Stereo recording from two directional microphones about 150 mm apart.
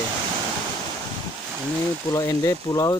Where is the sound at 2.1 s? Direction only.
20° left (ahead or behind).